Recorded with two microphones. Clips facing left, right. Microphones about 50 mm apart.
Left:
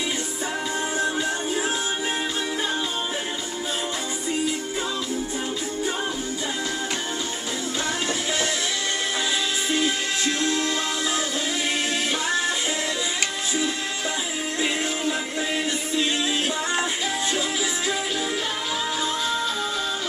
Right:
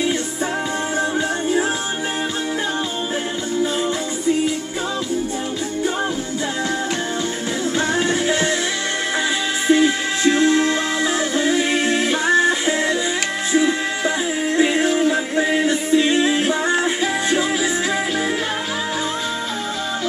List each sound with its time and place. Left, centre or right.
8.1 s music: right
9.7 s music: right